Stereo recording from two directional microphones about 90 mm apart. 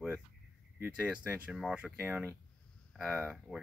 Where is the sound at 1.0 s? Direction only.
15° right (ahead or behind).